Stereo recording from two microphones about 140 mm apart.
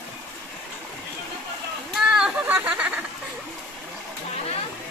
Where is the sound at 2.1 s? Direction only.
5° right (ahead or behind).